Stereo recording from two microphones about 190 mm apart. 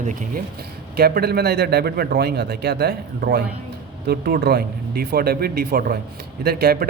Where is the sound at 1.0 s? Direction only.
55° right (ahead or behind).